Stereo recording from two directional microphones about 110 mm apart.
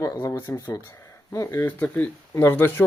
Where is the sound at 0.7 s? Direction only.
25° left (ahead or behind).